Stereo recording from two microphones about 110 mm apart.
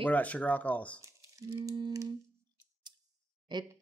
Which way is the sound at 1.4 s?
30° right (ahead or behind).